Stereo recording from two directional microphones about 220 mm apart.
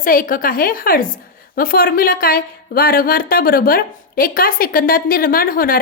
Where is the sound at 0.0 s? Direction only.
40° left (ahead or behind).